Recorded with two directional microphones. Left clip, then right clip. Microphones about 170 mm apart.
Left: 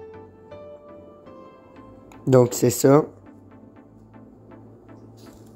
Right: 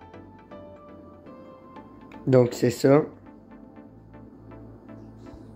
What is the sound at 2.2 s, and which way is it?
Speech, 25° left (ahead or behind).